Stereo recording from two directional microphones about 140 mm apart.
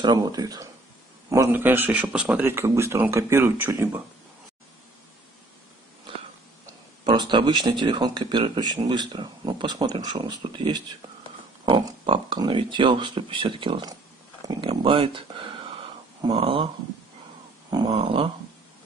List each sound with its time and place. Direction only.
0.0 s speech: 30° right (ahead or behind)
6.6 s speech: 30° right (ahead or behind)
17.8 s speech: 45° right (ahead or behind)